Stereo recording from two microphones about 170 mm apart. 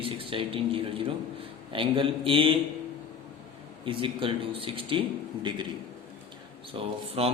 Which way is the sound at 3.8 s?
30° right (ahead or behind).